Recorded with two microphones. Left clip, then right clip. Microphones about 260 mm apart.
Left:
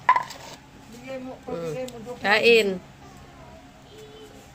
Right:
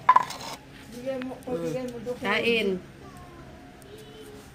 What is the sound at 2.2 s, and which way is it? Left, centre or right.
Speech, left.